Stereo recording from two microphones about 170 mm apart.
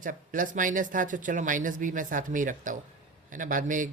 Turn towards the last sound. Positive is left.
turn(degrees=-50)  # may be behind; listen again after turning